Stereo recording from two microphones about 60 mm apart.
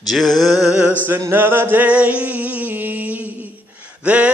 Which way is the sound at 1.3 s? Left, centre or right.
Right.